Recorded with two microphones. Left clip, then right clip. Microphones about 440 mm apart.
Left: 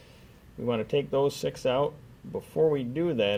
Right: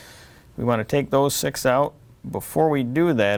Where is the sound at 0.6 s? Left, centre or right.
Right.